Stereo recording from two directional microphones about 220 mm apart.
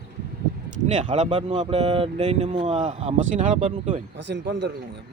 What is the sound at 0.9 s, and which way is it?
A man's voice, 30° right (ahead or behind).